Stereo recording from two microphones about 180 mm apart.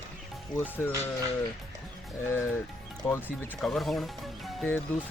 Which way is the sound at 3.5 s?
Centre (ahead or behind).